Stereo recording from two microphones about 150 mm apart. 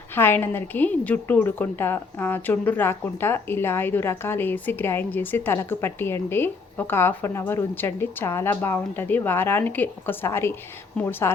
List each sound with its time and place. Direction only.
0.2 s a woman's voice: 15° left (ahead or behind)